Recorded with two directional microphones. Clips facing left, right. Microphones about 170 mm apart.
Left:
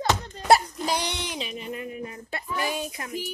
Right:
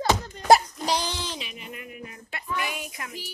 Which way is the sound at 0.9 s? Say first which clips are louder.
Right 2 dB; 65° left (ahead or behind).